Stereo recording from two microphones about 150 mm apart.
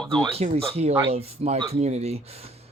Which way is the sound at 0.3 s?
40° right (ahead or behind).